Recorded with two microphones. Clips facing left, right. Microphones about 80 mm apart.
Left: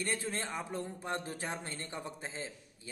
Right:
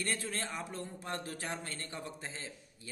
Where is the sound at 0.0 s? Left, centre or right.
Left.